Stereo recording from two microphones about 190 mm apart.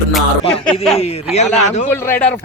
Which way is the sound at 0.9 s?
35° left (ahead or behind).